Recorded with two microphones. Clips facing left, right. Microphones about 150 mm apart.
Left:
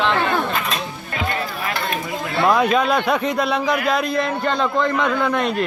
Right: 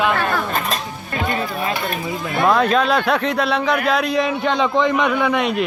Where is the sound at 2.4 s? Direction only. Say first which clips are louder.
Right 1 dB; 10° left (ahead or behind).